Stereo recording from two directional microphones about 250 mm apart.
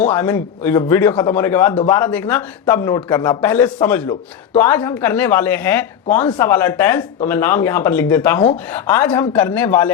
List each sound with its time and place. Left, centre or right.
0.1 s a man's voice: centre
2.0 s speech: centre